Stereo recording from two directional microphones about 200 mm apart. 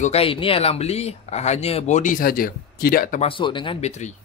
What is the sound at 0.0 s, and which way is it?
Speech, 30° left (ahead or behind).